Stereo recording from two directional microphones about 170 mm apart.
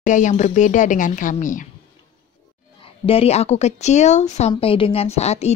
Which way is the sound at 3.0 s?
35° left (ahead or behind).